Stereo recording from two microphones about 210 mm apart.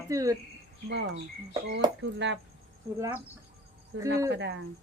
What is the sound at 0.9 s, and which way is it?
A woman's voice, 55° right (ahead or behind).